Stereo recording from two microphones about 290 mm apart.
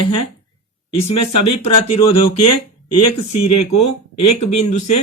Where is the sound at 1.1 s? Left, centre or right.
Left.